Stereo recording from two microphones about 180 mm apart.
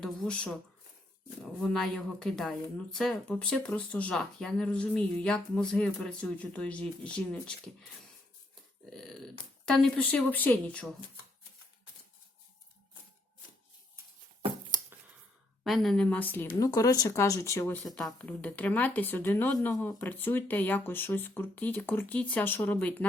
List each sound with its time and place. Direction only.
0.0 s speech: centre (ahead or behind)
1.6 s speech: 5° left (ahead or behind)
8.9 s speech: centre (ahead or behind)
14.7 s a sound: 20° right (ahead or behind)
15.6 s speech: centre (ahead or behind)
17.8 s speech: 5° left (ahead or behind)